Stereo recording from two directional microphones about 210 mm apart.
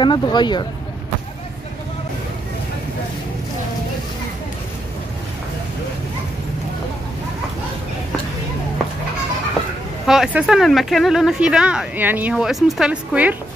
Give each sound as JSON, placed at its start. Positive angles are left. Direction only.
{"t": 0.0, "sound": "speech", "side_deg": 20}
{"t": 10.0, "sound": "speech", "side_deg": 0}